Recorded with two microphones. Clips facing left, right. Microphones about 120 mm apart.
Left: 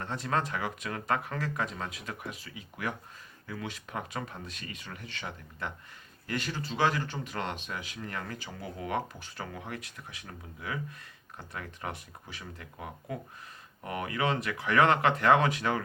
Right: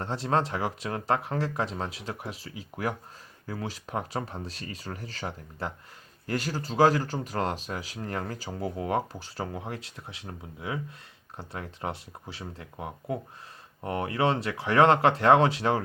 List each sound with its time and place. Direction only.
0.0 s speech: 30° right (ahead or behind)